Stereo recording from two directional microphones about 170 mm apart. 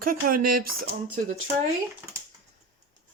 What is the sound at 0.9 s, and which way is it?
Speech, 45° right (ahead or behind).